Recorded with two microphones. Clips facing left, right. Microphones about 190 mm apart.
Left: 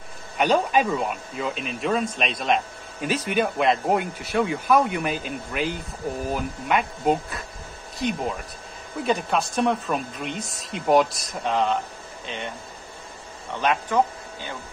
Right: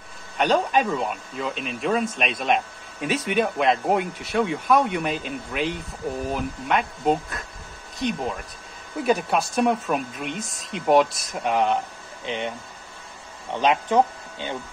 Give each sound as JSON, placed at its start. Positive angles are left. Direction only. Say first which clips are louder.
{"t": 0.4, "sound": "speech", "louder": "even", "side_deg": 5}
{"t": 11.5, "sound": "speech", "louder": "right 1 dB", "side_deg": -15}